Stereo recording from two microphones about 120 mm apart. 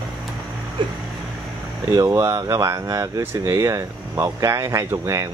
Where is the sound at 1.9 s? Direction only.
30° right (ahead or behind).